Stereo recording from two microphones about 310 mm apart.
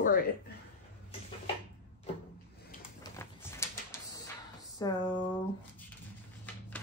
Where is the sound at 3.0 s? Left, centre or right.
Centre.